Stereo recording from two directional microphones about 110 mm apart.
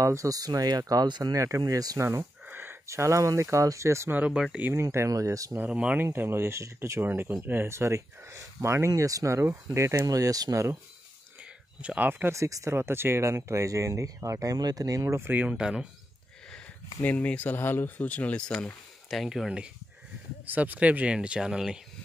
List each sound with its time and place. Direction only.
0.0 s speech: 30° right (ahead or behind)
2.4 s speech: 15° right (ahead or behind)
4.2 s speech: 10° right (ahead or behind)
4.8 s speech: 30° right (ahead or behind)
5.6 s speech: 10° right (ahead or behind)
6.0 s speech: 20° right (ahead or behind)
11.3 s speech: 10° right (ahead or behind)
17.0 s speech: 15° left (ahead or behind)
19.0 s speech: centre (ahead or behind)